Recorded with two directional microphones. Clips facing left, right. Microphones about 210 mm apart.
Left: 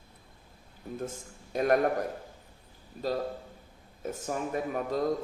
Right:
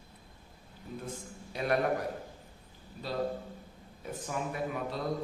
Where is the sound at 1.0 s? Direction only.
45° left (ahead or behind).